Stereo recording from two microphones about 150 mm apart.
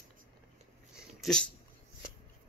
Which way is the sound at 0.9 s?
Centre (ahead or behind).